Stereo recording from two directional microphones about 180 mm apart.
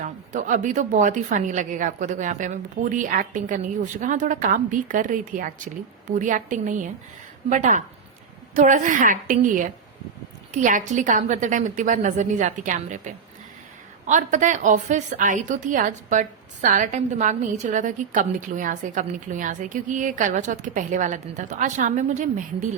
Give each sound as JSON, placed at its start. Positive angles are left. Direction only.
{"t": 0.0, "sound": "a woman's voice", "side_deg": -45}